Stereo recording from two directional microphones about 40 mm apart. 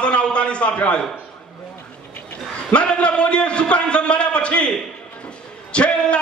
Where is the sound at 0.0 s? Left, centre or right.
Left.